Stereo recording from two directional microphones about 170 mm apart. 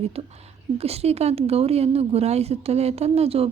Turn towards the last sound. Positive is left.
turn(degrees=-35)  # may be behind; listen again after turning